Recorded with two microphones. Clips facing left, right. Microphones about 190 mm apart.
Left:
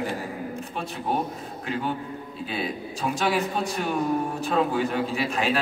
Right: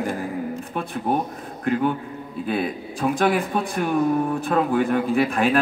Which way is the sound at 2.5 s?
55° right (ahead or behind).